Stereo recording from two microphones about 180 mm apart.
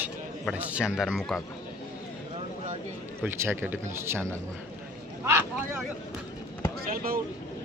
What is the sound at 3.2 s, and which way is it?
Speech, 10° right (ahead or behind).